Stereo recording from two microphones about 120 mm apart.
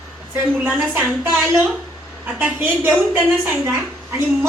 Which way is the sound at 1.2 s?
20° right (ahead or behind).